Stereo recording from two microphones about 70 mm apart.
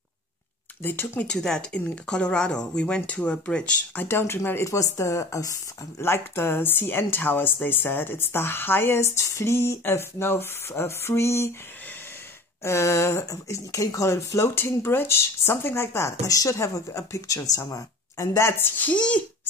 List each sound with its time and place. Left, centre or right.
0.8 s speech: left
1.2 s speech: centre
4.0 s speech: left
4.6 s speech: left
6.0 s speech: left
12.6 s speech: left
13.2 s speech: left
18.5 s speech: left
18.9 s speech: centre